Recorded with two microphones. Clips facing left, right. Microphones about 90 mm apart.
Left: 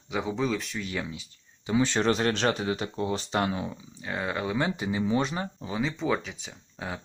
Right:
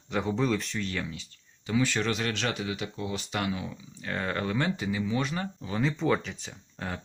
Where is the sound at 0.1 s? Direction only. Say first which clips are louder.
Right 1 dB; 5° left (ahead or behind); by 3.8 s 30° left (ahead or behind).